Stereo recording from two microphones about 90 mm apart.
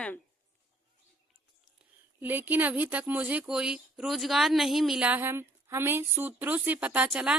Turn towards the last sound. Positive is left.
turn(degrees=-10)  # may be behind; listen again after turning